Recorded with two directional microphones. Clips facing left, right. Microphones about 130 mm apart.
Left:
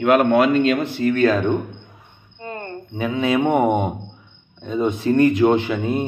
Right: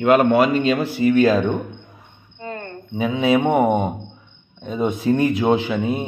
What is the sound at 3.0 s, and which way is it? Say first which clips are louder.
Speech: right 2 dB; 10° right (ahead or behind).